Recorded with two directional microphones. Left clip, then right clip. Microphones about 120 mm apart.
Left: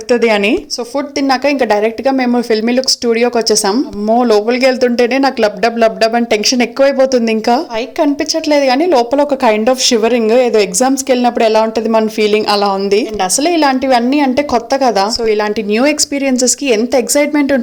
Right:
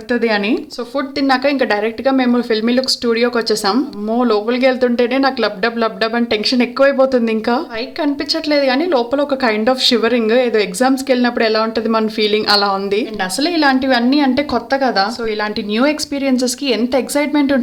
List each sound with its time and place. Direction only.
0.3 s speech: 15° left (ahead or behind)
0.9 s a woman's voice: 30° left (ahead or behind)